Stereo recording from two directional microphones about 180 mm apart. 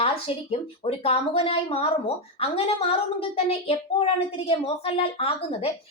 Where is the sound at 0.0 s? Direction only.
35° left (ahead or behind).